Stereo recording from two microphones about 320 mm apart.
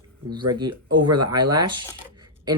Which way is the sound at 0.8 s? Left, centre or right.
Right.